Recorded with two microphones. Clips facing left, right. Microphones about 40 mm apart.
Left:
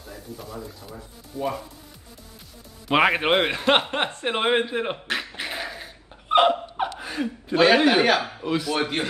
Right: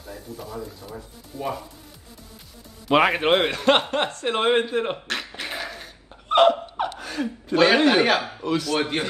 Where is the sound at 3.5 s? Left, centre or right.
Left.